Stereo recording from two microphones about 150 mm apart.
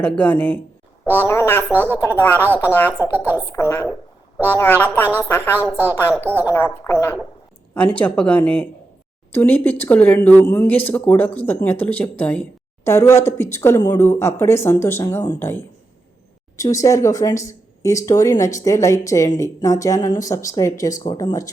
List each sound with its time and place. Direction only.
0.0 s speech: 10° left (ahead or behind)
3.0 s a woman's voice: 15° right (ahead or behind)
3.3 s speech: 20° left (ahead or behind)